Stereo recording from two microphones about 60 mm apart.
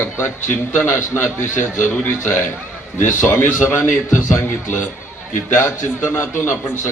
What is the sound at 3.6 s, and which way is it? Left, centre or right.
A man's voice, left.